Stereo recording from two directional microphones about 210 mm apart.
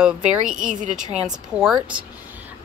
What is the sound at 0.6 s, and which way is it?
Speech, 35° right (ahead or behind).